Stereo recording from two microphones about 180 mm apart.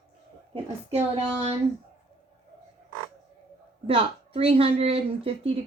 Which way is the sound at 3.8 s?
30° right (ahead or behind).